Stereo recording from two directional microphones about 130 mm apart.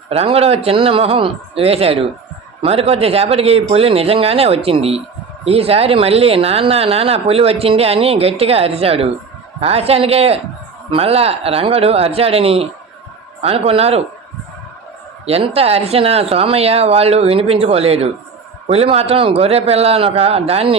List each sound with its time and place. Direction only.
0.1 s speech: 50° right (ahead or behind)
15.3 s speech: 50° right (ahead or behind)